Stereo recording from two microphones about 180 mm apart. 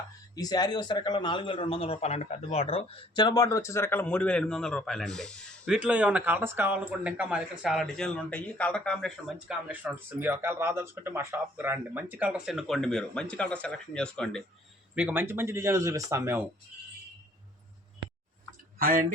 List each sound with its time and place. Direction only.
0.3 s a man's voice: 20° left (ahead or behind); by 14.4 s 5° left (ahead or behind)
14.9 s speech: 10° right (ahead or behind)
18.8 s speech: 50° right (ahead or behind)